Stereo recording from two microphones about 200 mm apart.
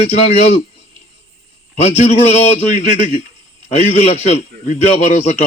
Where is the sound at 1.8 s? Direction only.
35° left (ahead or behind).